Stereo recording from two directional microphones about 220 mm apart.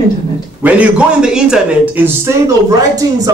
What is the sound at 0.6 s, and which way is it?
A man's voice, 5° right (ahead or behind).